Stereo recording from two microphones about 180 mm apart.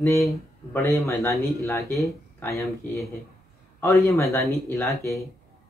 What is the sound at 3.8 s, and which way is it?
Speech, 15° left (ahead or behind).